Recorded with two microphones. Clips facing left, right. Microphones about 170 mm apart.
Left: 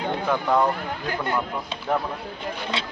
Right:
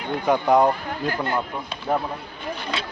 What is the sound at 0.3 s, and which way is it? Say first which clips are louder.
Speech: right 5 dB; 20° right (ahead or behind).